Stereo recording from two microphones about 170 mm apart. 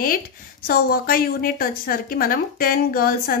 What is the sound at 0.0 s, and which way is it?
A woman's voice, 60° left (ahead or behind).